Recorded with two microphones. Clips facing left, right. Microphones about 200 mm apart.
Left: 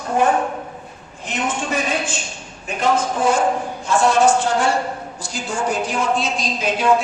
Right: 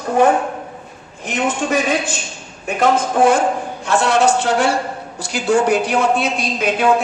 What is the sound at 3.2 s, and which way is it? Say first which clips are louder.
A man's voice: right 4 dB; 70° right (ahead or behind).